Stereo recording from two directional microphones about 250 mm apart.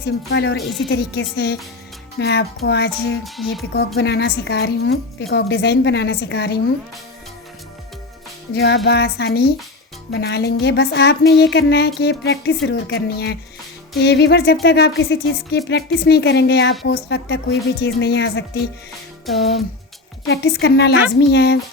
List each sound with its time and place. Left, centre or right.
0.0 s speech: left
0.6 s music: centre
0.9 s speech: left
3.2 s music: centre
3.8 s speech: left
8.5 s speech: left
19.2 s music: centre
20.2 s speech: left